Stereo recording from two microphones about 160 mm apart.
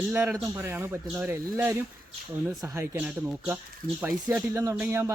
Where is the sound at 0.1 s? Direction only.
10° right (ahead or behind).